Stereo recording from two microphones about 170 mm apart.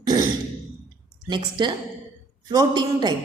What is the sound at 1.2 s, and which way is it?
A woman's voice, 25° right (ahead or behind).